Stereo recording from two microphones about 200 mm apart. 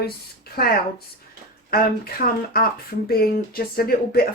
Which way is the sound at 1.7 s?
50° left (ahead or behind).